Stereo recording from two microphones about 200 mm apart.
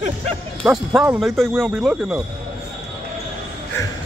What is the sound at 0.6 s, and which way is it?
Speech, 5° right (ahead or behind).